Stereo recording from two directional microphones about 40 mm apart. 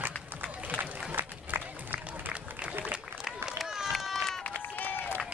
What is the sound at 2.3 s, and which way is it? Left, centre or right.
Applause, right.